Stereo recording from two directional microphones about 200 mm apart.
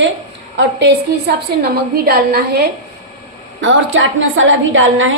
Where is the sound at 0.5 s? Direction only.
60° right (ahead or behind).